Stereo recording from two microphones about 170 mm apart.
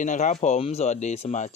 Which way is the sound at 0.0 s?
45° left (ahead or behind).